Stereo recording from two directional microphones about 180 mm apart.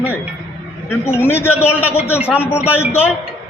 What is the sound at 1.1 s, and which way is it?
Speech, 10° left (ahead or behind).